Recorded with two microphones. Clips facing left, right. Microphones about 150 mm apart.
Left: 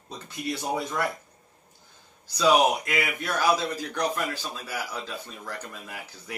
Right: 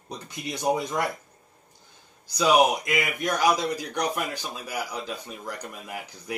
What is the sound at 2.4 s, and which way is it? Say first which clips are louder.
Speech: right 1 dB; 15° right (ahead or behind).